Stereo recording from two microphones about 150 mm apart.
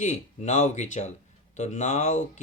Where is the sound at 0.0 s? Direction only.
50° left (ahead or behind).